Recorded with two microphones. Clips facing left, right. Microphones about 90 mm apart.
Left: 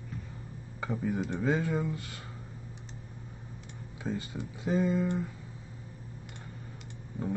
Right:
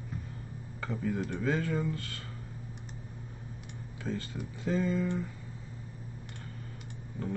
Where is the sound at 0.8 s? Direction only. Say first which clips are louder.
Left 1 dB; 15° left (ahead or behind).